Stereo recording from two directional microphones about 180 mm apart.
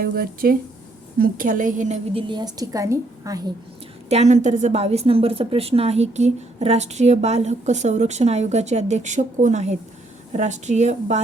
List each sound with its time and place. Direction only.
0.0 s a woman's voice: 55° right (ahead or behind)
2.1 s a woman's voice: 25° right (ahead or behind)
4.1 s a woman's voice: 40° right (ahead or behind)